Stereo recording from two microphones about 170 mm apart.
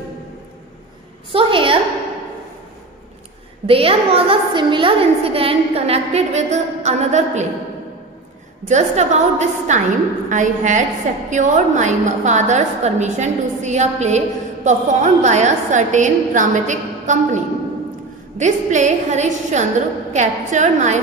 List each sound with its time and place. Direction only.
1.3 s a sound: 30° right (ahead or behind)
3.6 s a woman's voice: 35° right (ahead or behind)
8.6 s a woman's voice: 40° right (ahead or behind)
18.4 s a woman's voice: 45° right (ahead or behind)